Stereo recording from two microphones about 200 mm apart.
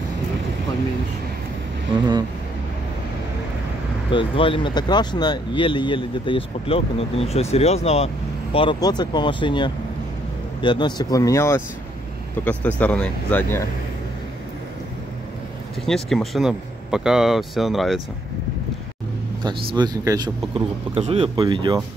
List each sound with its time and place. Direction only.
4.1 s speech: 25° left (ahead or behind)
8.5 s speech: 20° left (ahead or behind)
15.8 s speech: centre (ahead or behind)
19.4 s speech: 20° right (ahead or behind)